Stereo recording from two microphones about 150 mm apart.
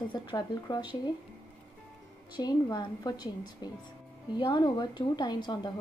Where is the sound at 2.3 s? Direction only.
30° left (ahead or behind).